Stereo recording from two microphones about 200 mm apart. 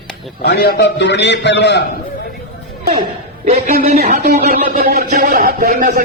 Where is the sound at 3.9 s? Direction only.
40° right (ahead or behind).